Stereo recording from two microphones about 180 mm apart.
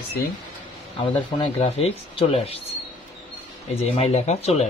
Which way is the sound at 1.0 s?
25° left (ahead or behind).